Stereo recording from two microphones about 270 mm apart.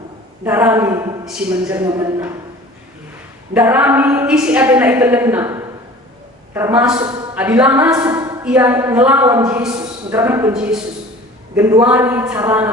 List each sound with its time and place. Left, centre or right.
0.4 s a woman's voice: centre
3.5 s a woman's voice: centre